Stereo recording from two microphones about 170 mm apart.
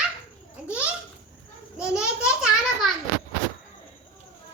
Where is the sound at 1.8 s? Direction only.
5° right (ahead or behind).